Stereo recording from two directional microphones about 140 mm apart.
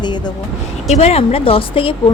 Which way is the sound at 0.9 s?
50° left (ahead or behind).